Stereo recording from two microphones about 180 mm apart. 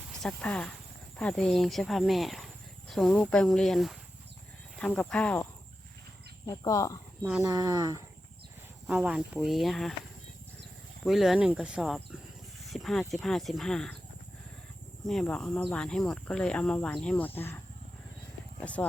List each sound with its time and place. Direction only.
0.1 s speech: 5° left (ahead or behind)
6.4 s speech: 20° left (ahead or behind)
7.4 s speech: 20° right (ahead or behind)
8.9 s speech: 5° right (ahead or behind)
11.0 s speech: centre (ahead or behind)
15.0 s speech: centre (ahead or behind)
18.6 s speech: 5° left (ahead or behind)